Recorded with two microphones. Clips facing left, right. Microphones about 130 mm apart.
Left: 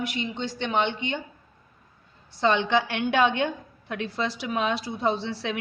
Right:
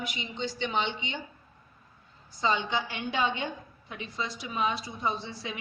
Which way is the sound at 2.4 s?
70° left (ahead or behind).